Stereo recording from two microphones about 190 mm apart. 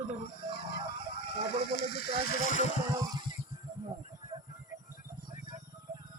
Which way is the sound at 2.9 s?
20° right (ahead or behind).